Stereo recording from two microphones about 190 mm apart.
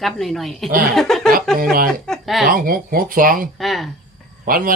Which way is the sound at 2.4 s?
50° right (ahead or behind).